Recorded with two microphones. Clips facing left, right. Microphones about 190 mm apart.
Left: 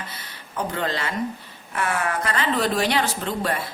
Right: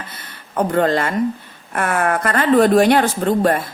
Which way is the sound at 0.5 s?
50° right (ahead or behind).